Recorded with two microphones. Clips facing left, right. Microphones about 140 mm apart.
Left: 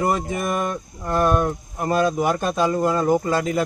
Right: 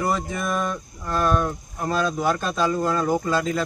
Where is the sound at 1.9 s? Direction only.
50° left (ahead or behind).